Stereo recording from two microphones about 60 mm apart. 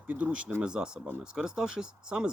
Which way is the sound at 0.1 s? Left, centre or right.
Right.